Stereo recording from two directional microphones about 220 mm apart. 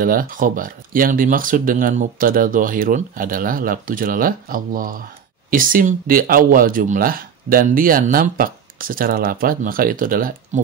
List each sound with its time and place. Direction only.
0.0 s speech: 40° right (ahead or behind)